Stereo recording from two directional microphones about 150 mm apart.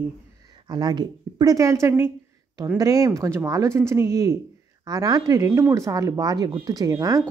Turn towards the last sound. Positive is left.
turn(degrees=-20)  # may be behind; listen again after turning